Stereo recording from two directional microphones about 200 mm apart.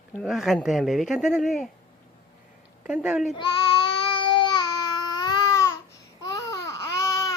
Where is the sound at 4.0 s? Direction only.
25° left (ahead or behind).